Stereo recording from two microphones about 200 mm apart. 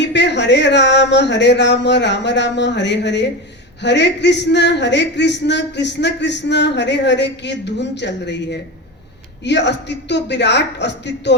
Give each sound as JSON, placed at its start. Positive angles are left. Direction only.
{"t": 0.0, "sound": "speech", "side_deg": 60}